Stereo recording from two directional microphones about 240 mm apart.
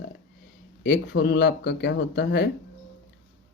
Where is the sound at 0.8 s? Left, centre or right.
Left.